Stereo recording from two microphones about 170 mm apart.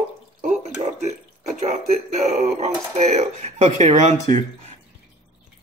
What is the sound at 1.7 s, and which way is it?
Speech, 45° right (ahead or behind).